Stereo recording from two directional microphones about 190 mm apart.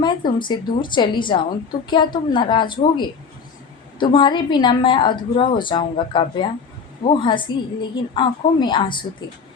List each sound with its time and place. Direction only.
0.0 s a woman's voice: 25° left (ahead or behind)
4.0 s a woman's voice: 25° left (ahead or behind)